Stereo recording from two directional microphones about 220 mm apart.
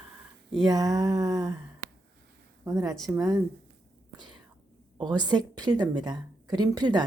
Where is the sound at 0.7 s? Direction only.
15° right (ahead or behind).